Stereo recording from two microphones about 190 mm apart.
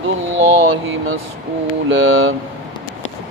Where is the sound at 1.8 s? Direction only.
90° right.